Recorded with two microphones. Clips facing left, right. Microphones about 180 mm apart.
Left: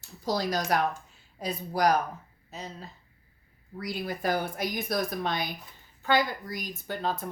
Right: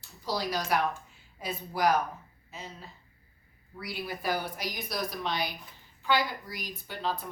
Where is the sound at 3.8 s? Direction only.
45° left (ahead or behind).